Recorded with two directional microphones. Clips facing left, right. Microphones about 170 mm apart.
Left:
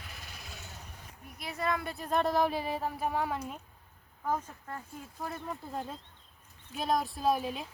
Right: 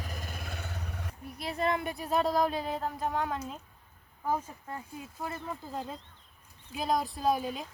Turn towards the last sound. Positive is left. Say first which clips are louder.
# even
turn(degrees=0)  # may be behind; listen again after turning